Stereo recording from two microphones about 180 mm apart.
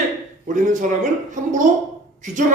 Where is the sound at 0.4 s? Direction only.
45° right (ahead or behind).